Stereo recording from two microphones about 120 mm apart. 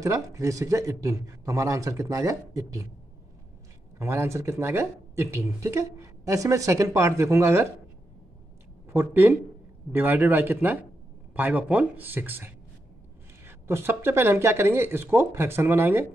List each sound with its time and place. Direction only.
0.0 s speech: 25° right (ahead or behind)
4.0 s speech: 20° right (ahead or behind)
8.9 s speech: 20° right (ahead or behind)